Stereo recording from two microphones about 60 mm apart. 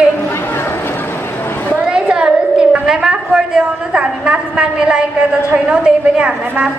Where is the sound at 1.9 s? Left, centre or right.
Centre.